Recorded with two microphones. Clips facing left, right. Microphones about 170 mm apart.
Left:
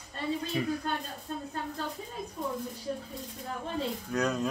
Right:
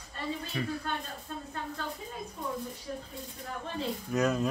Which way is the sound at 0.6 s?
20° left (ahead or behind).